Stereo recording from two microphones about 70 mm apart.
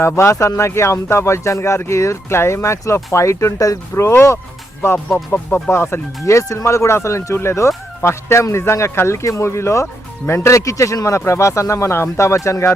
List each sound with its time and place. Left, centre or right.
0.0 s speech: left
4.0 s speech: left
5.0 s music: left
5.6 s speech: left
10.6 s speech: left